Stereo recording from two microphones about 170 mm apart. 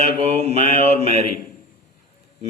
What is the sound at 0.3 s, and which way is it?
A man's voice, 40° right (ahead or behind).